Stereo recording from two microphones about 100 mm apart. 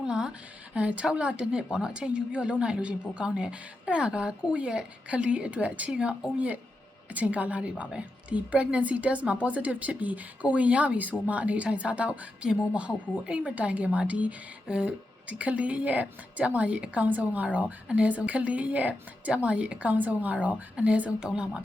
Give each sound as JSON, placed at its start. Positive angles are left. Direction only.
{"t": 0.0, "sound": "speech", "side_deg": -5}